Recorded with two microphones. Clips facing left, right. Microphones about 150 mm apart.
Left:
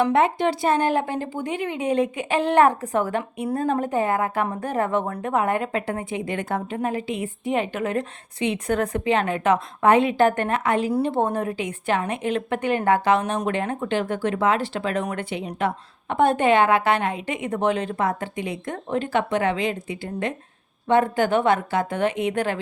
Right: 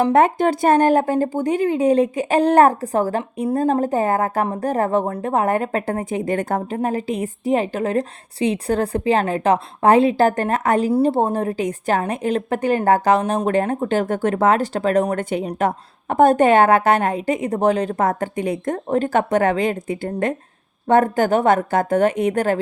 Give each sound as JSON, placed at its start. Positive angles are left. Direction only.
{"t": 0.0, "sound": "a woman's voice", "side_deg": -45}